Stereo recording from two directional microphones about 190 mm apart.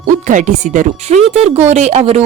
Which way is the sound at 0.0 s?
40° right (ahead or behind).